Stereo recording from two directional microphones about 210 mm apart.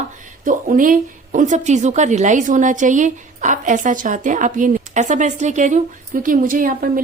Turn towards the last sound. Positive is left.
turn(degrees=-40)  # may be behind; listen again after turning